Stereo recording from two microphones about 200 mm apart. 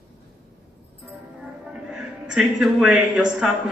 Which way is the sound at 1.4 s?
5° right (ahead or behind).